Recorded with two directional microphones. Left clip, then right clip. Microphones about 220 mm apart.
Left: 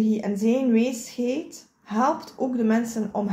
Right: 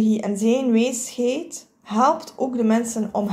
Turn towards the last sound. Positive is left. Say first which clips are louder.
# right 3 dB
turn(degrees=-25)  # may be behind; listen again after turning